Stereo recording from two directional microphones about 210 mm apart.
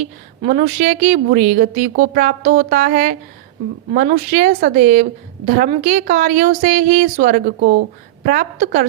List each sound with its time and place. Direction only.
0.4 s a woman's voice: 35° right (ahead or behind)